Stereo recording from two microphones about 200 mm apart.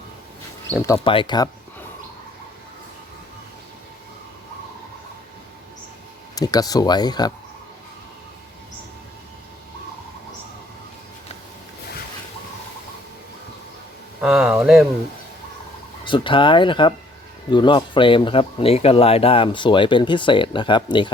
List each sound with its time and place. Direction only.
0.7 s speech: 15° left (ahead or behind)
0.9 s speech: 25° left (ahead or behind)
6.3 s speech: 20° left (ahead or behind)
14.2 s speech: 5° right (ahead or behind)
16.0 s speech: 25° left (ahead or behind)